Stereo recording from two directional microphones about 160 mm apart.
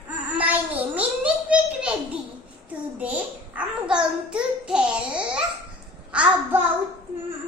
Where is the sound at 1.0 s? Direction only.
5° right (ahead or behind).